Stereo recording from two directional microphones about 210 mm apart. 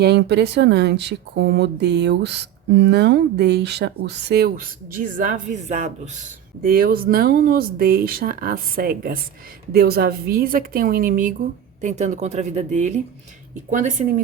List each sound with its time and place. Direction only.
0.0 s speech: 55° right (ahead or behind); by 13.9 s 35° right (ahead or behind)